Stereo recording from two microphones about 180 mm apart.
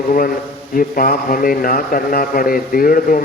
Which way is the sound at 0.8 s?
50° left (ahead or behind).